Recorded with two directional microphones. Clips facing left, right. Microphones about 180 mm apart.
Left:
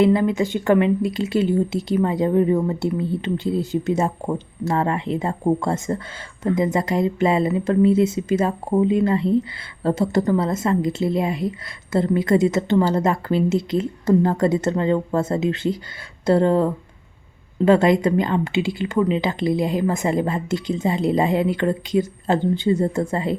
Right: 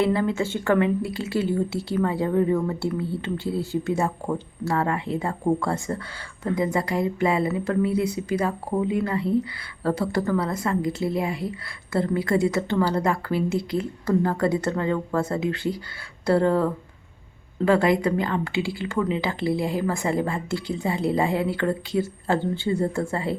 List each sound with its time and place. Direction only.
0.0 s speech: 15° left (ahead or behind)